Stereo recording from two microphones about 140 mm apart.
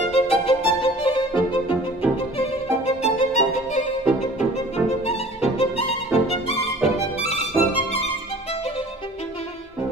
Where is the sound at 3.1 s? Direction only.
60° left (ahead or behind).